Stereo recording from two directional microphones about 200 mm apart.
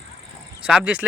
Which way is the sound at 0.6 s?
5° right (ahead or behind).